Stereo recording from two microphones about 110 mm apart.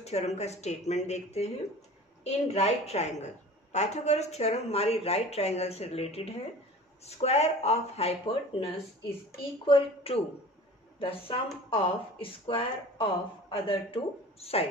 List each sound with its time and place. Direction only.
0.0 s speech: 75° left (ahead or behind)